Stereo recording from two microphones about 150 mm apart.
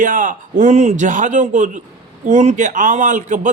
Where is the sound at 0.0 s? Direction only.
60° right (ahead or behind).